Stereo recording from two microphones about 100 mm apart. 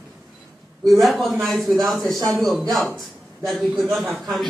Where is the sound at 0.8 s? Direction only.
Centre (ahead or behind).